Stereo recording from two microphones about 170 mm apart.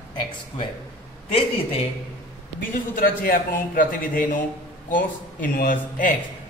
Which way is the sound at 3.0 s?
55° left (ahead or behind).